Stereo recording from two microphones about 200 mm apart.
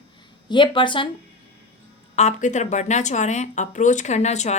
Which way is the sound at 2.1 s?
35° left (ahead or behind).